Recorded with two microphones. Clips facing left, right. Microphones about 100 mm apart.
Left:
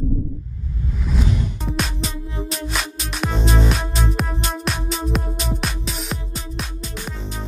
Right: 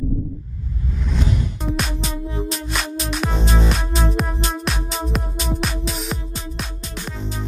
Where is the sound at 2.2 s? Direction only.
25° right (ahead or behind).